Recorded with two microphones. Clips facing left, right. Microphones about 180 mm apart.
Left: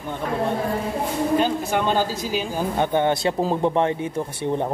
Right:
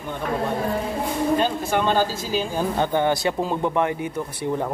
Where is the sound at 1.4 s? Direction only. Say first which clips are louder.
Even; 15° left (ahead or behind).